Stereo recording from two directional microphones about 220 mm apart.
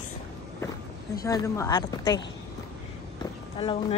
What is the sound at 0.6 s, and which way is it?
Speech, 15° left (ahead or behind).